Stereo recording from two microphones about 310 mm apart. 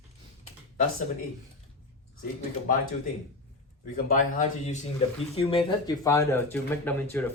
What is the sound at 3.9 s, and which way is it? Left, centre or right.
Speech, left.